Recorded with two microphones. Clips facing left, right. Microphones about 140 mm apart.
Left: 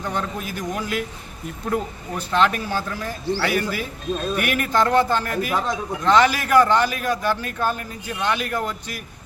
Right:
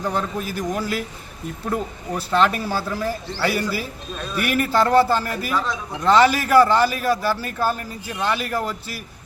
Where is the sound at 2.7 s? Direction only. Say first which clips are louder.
Right 2 dB; 10° right (ahead or behind).